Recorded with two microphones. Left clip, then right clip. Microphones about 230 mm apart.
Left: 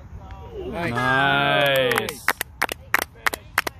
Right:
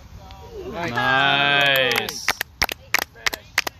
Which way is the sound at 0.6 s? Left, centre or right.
Centre.